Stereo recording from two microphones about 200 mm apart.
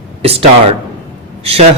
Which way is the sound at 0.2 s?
30° right (ahead or behind).